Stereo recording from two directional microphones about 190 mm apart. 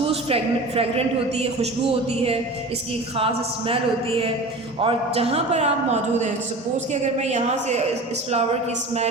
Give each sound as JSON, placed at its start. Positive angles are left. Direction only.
{"t": 0.1, "sound": "a man's voice", "side_deg": -30}
{"t": 3.2, "sound": "a sound", "side_deg": -30}
{"t": 4.8, "sound": "a man's voice", "side_deg": -30}